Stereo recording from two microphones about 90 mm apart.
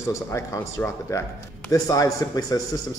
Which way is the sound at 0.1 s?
35° left (ahead or behind).